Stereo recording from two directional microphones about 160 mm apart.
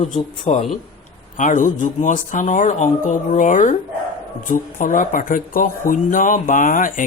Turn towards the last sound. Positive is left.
turn(degrees=55)  # may be behind; listen again after turning